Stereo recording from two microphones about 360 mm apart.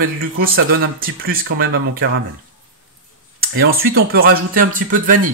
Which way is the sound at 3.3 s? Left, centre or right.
Right.